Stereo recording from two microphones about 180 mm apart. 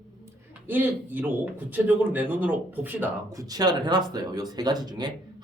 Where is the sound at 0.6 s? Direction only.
10° right (ahead or behind).